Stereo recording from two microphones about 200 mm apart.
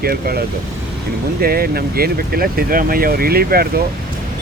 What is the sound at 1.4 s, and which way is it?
Speech, 50° right (ahead or behind).